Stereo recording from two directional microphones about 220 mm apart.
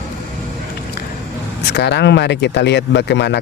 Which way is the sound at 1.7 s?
50° left (ahead or behind).